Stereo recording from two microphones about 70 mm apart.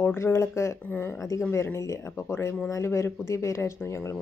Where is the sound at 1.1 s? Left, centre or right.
Left.